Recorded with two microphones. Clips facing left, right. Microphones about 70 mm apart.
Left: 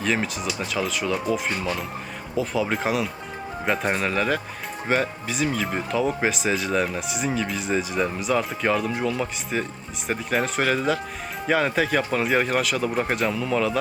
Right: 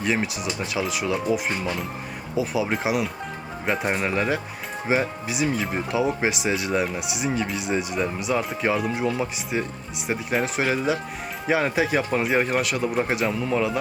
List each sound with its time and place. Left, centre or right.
0.0 s speech: centre
9.0 s speech: centre
10.1 s speech: centre